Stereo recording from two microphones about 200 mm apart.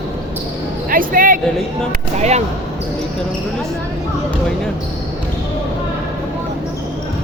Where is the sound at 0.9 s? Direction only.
45° right (ahead or behind).